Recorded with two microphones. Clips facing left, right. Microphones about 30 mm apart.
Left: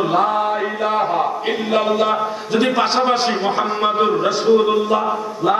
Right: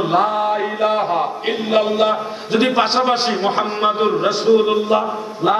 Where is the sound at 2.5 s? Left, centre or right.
Right.